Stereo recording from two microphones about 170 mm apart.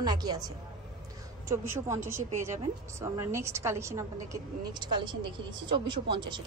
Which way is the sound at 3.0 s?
15° right (ahead or behind).